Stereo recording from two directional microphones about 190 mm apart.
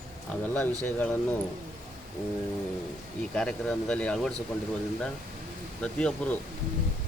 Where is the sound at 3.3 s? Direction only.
5° left (ahead or behind).